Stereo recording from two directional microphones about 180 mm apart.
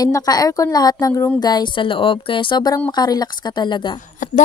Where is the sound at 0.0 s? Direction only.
20° left (ahead or behind).